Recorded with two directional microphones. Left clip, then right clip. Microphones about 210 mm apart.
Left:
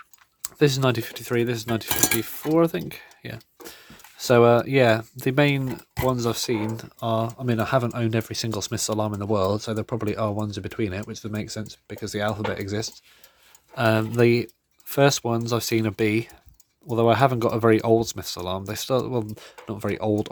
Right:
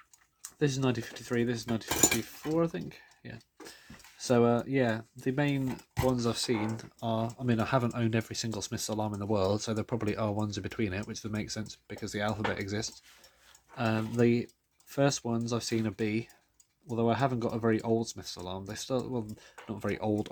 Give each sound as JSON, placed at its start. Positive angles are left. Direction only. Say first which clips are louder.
{"t": 0.4, "sound": "speech", "louder": "left 10 dB", "side_deg": 45}
{"t": 13.7, "sound": "speech", "louder": "left 10 dB", "side_deg": 40}